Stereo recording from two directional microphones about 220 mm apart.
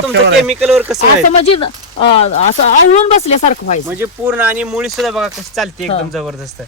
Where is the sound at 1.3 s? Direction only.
25° left (ahead or behind).